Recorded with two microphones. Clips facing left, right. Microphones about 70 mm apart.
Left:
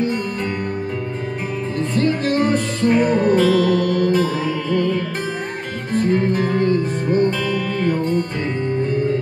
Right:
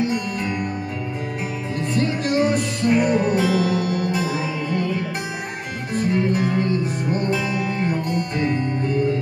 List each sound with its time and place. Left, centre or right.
1.8 s music: centre
5.9 s guitar: centre
6.4 s music: left
7.2 s music: centre